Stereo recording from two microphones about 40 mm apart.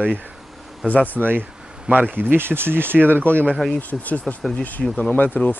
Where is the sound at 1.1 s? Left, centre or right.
Right.